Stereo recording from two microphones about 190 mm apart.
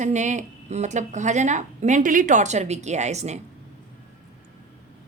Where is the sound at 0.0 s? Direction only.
40° right (ahead or behind).